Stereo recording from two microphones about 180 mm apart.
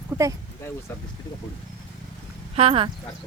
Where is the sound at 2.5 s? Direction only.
30° right (ahead or behind).